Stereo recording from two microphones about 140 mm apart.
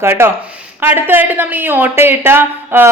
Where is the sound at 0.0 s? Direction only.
20° right (ahead or behind).